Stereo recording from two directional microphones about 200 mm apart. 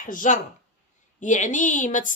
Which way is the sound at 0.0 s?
40° left (ahead or behind).